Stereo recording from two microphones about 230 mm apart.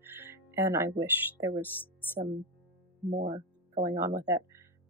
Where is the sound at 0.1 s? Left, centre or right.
Centre.